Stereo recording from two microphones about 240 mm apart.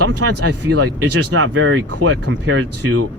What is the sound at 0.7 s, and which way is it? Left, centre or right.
Speech, right.